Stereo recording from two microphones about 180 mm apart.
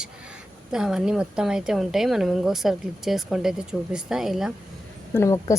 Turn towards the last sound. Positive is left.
turn(degrees=15)  # may be behind; listen again after turning